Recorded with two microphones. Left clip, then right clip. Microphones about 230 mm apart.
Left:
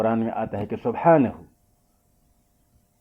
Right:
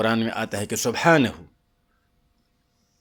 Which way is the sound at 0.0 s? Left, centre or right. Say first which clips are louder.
Even; right.